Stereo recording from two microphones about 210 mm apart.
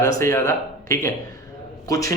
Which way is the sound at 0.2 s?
15° left (ahead or behind).